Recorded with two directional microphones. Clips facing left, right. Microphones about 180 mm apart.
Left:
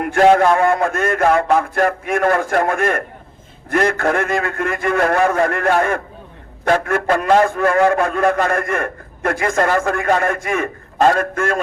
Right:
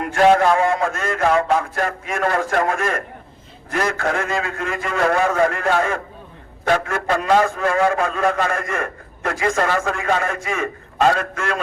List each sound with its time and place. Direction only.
0.0 s a man's voice: 55° left (ahead or behind)